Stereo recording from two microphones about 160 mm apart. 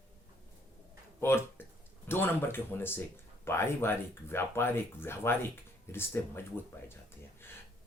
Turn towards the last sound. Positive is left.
turn(degrees=15)  # may be behind; listen again after turning